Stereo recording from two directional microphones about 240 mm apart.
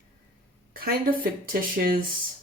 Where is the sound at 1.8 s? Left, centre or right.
Right.